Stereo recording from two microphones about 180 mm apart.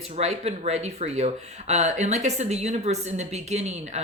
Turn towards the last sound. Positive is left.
turn(degrees=-40)  # may be behind; listen again after turning